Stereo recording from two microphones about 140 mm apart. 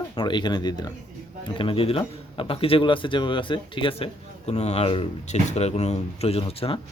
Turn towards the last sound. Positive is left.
turn(degrees=45)  # may be behind; listen again after turning